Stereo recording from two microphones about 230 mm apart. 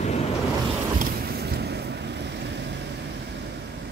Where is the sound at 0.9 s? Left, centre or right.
Right.